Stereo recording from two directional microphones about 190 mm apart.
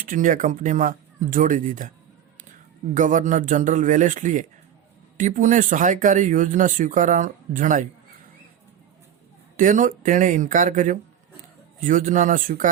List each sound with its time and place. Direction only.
0.0 s speech: 45° right (ahead or behind)
2.9 s a man's voice: 40° right (ahead or behind)
9.6 s speech: 45° right (ahead or behind)